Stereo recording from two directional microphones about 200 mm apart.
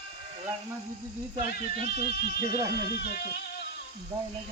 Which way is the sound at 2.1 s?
55° left (ahead or behind).